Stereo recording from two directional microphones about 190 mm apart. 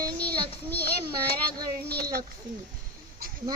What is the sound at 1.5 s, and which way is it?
Speech, 20° right (ahead or behind).